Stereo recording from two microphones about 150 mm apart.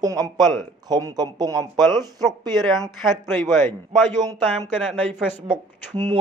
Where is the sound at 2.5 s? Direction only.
Centre (ahead or behind).